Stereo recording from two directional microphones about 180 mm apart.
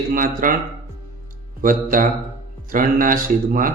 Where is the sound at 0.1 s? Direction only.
50° right (ahead or behind).